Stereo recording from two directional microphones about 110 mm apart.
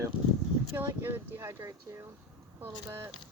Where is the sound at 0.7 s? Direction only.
20° right (ahead or behind).